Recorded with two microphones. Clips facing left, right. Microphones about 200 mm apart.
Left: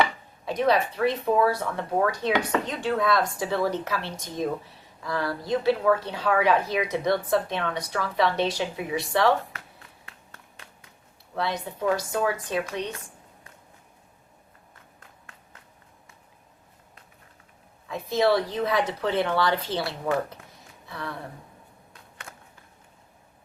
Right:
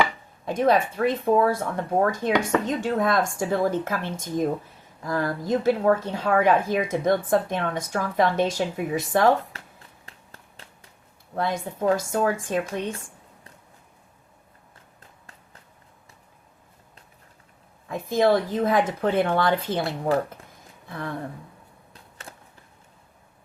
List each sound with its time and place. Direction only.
0.4 s speech: 50° right (ahead or behind)
11.3 s speech: 50° right (ahead or behind)
11.9 s a woman's voice: 25° right (ahead or behind)
12.5 s speech: 50° right (ahead or behind)
17.8 s speech: 50° right (ahead or behind)
20.8 s a sound: 50° right (ahead or behind)